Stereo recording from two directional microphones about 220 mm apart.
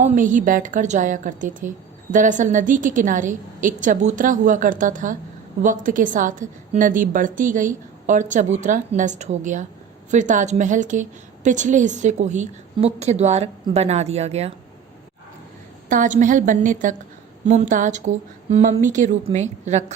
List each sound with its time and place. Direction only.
0.0 s a woman's voice: 35° right (ahead or behind)
15.9 s a woman's voice: 35° right (ahead or behind)